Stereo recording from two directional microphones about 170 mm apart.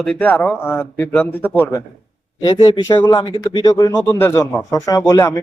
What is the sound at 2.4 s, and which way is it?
Speech, 30° left (ahead or behind).